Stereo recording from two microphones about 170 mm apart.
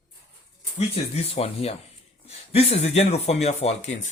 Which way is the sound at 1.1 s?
35° left (ahead or behind).